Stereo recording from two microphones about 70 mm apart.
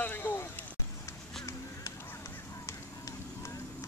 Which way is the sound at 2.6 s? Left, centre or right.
Left.